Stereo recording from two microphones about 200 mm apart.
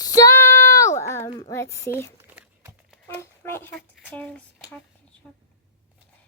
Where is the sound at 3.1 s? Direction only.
10° left (ahead or behind).